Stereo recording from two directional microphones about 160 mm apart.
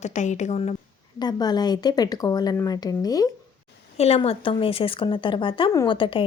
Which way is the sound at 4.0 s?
40° left (ahead or behind).